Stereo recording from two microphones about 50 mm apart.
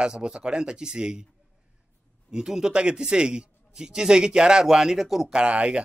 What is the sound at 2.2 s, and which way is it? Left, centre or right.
A man's voice, centre.